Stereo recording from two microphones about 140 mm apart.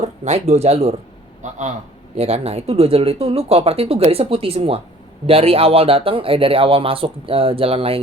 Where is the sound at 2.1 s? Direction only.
45° right (ahead or behind).